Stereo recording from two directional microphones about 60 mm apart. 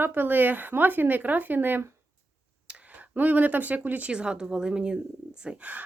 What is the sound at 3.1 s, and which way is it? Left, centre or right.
Speech, right.